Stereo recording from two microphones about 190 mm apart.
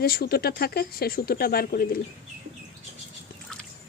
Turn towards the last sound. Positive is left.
turn(degrees=5)  # may be behind; listen again after turning